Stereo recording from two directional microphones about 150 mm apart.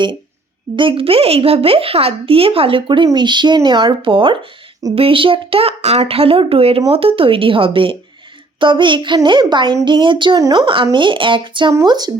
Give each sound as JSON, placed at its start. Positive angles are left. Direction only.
{"t": 0.8, "sound": "speech", "side_deg": -35}
{"t": 11.7, "sound": "speech", "side_deg": -25}